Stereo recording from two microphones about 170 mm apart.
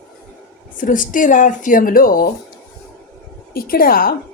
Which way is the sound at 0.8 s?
50° left (ahead or behind).